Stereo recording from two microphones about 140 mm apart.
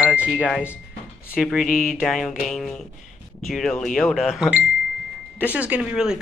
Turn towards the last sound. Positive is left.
turn(degrees=-5)  # may be behind; listen again after turning